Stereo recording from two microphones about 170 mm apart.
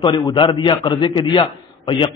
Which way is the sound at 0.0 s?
30° left (ahead or behind).